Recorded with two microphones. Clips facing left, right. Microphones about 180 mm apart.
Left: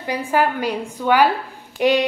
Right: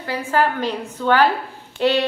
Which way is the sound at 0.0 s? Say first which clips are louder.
Left 1 dB; 15° left (ahead or behind).